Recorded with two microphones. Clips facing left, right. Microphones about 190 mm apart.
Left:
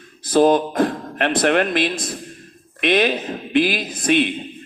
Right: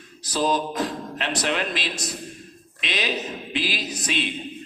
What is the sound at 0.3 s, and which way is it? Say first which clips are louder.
A man's voice: left 9 dB; 55° left (ahead or behind).